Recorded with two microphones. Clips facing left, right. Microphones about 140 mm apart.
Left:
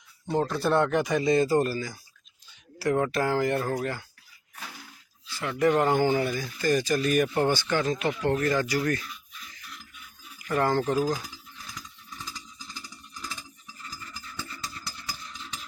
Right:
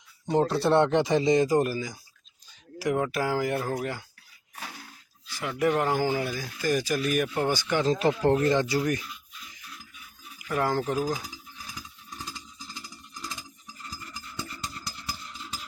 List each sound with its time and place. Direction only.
0.3 s speech: 25° right (ahead or behind); by 4.0 s 10° right (ahead or behind)
5.3 s speech: 10° right (ahead or behind)
7.9 s speech: 35° right (ahead or behind); by 9.0 s 15° right (ahead or behind)
10.4 s speech: 5° right (ahead or behind)